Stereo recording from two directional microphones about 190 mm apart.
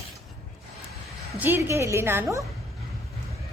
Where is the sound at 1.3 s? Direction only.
10° right (ahead or behind).